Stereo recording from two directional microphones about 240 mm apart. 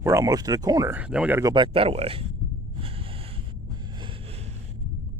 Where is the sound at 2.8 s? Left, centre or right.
Right.